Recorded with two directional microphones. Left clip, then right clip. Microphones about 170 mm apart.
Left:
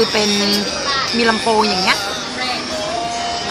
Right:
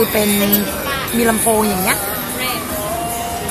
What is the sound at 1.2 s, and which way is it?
Music, 10° left (ahead or behind).